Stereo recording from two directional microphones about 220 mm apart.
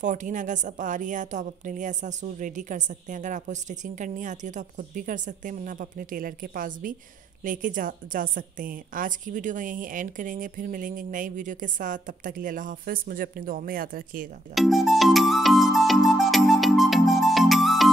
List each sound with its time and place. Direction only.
0.0 s a woman's voice: 35° right (ahead or behind)
14.5 s music: centre (ahead or behind)